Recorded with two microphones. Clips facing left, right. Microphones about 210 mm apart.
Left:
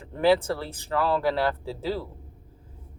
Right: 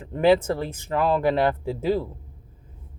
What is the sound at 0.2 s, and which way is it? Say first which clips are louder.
Speech: right 3 dB; 20° right (ahead or behind).